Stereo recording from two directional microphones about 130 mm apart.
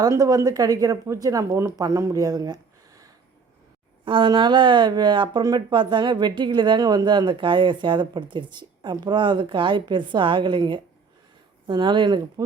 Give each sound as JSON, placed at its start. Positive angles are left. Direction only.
{"t": 0.0, "sound": "speech", "side_deg": -25}
{"t": 4.0, "sound": "speech", "side_deg": -40}